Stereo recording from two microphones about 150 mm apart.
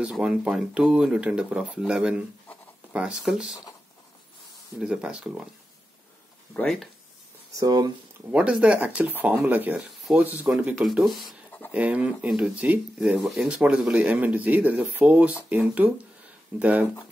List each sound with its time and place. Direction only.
0.0 s speech: 5° right (ahead or behind)
4.7 s speech: 5° right (ahead or behind)
6.5 s speech: 5° left (ahead or behind)
7.5 s speech: 25° right (ahead or behind)
8.3 s speech: 10° right (ahead or behind)